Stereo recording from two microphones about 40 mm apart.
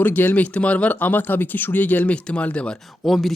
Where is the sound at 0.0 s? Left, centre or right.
Left.